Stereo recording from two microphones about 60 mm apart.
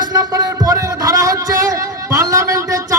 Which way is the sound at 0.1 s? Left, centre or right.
Right.